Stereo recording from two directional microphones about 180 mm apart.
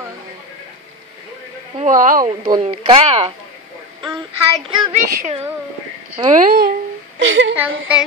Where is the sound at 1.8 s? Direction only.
45° right (ahead or behind).